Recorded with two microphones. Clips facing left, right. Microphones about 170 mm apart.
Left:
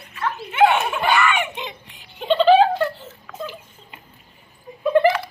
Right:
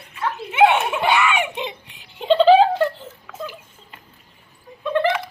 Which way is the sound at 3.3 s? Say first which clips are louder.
Left 1 dB; 5° right (ahead or behind).